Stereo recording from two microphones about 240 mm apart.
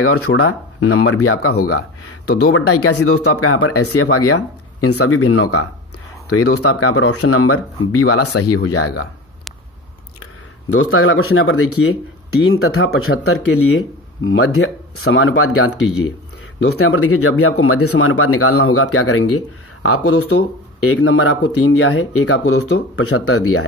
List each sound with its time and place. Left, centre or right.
0.0 s speech: left
2.5 s speech: left
10.7 s speech: left
16.7 s speech: left